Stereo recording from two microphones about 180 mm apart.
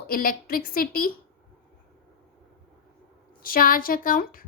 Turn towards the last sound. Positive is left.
turn(degrees=50)  # may be behind; listen again after turning